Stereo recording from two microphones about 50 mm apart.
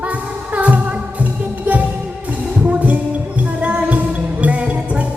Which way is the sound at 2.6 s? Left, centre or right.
Right.